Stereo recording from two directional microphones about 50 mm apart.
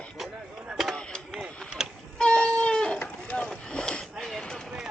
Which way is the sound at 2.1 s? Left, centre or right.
Centre.